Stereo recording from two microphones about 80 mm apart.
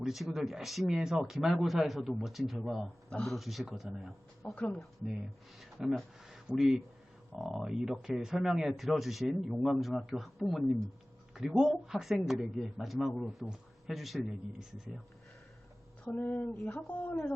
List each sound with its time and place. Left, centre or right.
0.0 s speech: centre
4.5 s a woman's voice: centre
5.5 s speech: centre
16.0 s a woman's voice: centre